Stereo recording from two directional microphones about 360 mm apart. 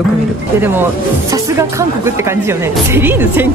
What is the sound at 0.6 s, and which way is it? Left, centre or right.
Speech, centre.